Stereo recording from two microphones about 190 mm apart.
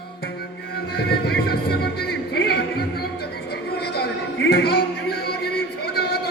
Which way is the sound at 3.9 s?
55° left (ahead or behind).